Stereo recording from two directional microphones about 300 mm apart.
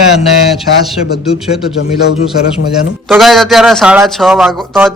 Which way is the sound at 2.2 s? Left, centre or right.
Centre.